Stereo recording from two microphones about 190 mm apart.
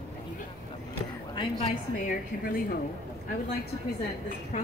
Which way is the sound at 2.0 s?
50° left (ahead or behind).